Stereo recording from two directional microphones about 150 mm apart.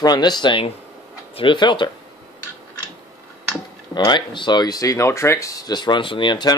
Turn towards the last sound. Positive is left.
turn(degrees=30)  # may be behind; listen again after turning